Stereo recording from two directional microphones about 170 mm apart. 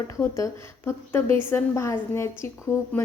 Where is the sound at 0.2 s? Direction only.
15° left (ahead or behind).